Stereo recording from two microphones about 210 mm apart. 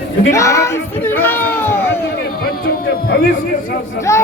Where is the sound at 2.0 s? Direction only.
45° left (ahead or behind).